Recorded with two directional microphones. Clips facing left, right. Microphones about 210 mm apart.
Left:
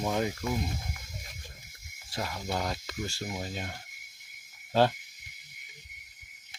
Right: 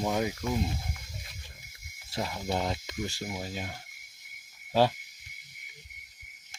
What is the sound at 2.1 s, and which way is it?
Speech, 20° right (ahead or behind).